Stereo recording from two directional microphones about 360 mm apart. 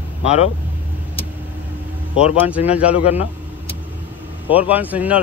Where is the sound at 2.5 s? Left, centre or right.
Centre.